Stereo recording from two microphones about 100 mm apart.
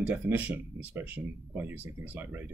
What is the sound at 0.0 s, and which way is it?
Speech, 20° right (ahead or behind).